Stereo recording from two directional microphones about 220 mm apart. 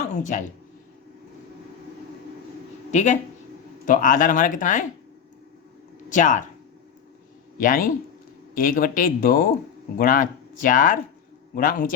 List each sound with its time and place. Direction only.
0.2 s speech: 35° left (ahead or behind)
2.9 s speech: 30° left (ahead or behind)
6.1 s speech: 35° left (ahead or behind)
7.6 s speech: 40° left (ahead or behind)